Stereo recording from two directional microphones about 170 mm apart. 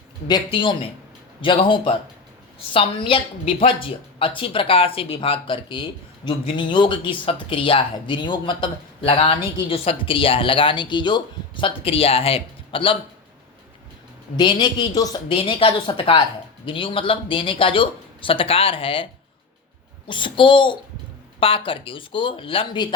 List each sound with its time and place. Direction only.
0.3 s a woman's voice: 25° left (ahead or behind)
14.3 s a woman's voice: 25° left (ahead or behind)
20.1 s a woman's voice: 30° left (ahead or behind)